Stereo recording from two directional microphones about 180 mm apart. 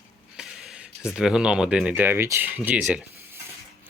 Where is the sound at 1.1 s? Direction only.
5° right (ahead or behind).